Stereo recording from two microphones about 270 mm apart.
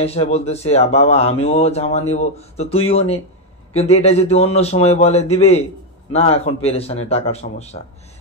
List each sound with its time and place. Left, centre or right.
0.0 s speech: left